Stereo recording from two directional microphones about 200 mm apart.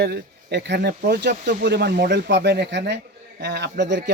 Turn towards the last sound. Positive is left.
turn(degrees=-60)  # may be behind; listen again after turning